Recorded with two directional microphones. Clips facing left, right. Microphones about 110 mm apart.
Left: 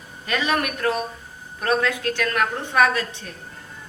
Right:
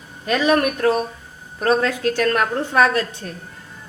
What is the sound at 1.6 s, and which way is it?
A woman's voice, 35° right (ahead or behind).